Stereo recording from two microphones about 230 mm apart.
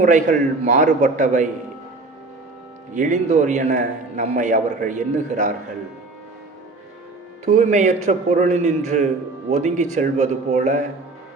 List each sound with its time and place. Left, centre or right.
0.0 s a man's voice: right
2.9 s a man's voice: right
7.4 s a man's voice: right